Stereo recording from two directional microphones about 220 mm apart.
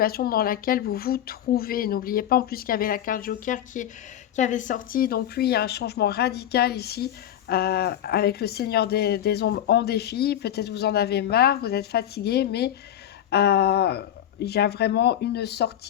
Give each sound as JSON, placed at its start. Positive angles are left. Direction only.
{"t": 0.0, "sound": "a woman's voice", "side_deg": 45}